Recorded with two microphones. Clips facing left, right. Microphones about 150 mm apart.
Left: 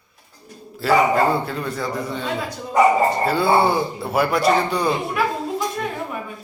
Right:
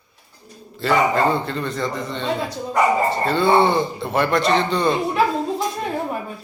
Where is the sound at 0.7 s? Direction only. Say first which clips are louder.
Left 1 dB; 5° left (ahead or behind).